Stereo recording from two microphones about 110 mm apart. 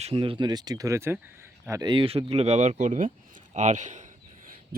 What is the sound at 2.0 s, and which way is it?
A man's voice, 65° right (ahead or behind).